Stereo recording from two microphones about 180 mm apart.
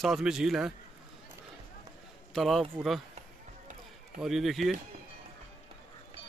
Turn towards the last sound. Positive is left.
turn(degrees=0)  # may be behind; listen again after turning